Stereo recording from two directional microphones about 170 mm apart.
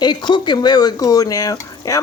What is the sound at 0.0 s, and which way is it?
Speech, 25° left (ahead or behind).